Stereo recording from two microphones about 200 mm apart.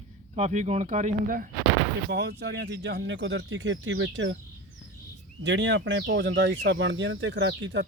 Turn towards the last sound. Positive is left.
turn(degrees=-60)  # may be behind; listen again after turning